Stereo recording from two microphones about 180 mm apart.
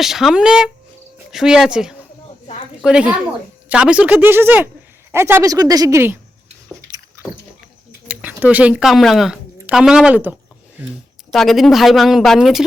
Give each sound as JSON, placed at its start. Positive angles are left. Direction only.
{"t": 0.0, "sound": "a woman's voice", "side_deg": 0}
{"t": 6.9, "sound": "a sound", "side_deg": -25}
{"t": 8.0, "sound": "speech", "side_deg": -5}